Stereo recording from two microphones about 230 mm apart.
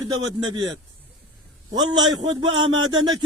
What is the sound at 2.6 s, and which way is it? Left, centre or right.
Speech, centre.